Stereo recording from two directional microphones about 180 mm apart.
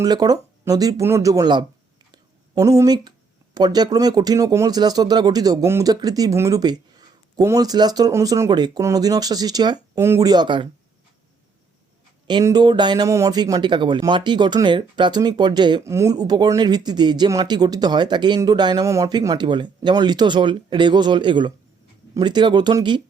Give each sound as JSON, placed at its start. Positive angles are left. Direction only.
{"t": 0.0, "sound": "speech", "side_deg": -20}
{"t": 12.3, "sound": "speech", "side_deg": -20}